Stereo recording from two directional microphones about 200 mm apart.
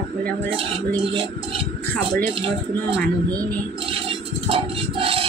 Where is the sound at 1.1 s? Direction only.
25° right (ahead or behind).